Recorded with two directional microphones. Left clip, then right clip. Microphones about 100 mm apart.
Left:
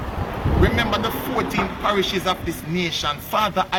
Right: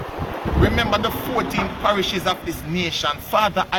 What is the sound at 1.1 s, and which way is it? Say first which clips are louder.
Speech: right 1 dB; 15° left (ahead or behind).